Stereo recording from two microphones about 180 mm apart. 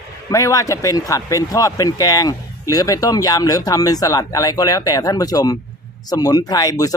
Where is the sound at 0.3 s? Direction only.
20° left (ahead or behind).